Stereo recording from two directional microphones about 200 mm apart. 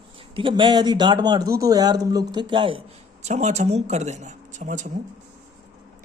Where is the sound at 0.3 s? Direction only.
25° right (ahead or behind).